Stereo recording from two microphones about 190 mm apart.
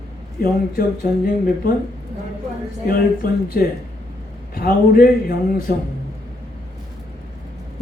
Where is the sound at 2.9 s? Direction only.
50° left (ahead or behind).